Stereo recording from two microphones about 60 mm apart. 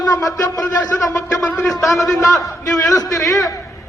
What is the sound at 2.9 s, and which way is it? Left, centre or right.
Speech, left.